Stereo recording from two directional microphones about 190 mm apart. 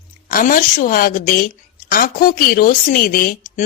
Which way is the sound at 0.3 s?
45° left (ahead or behind).